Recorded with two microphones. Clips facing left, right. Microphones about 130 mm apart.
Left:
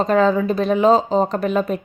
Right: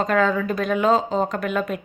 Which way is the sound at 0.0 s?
25° left (ahead or behind).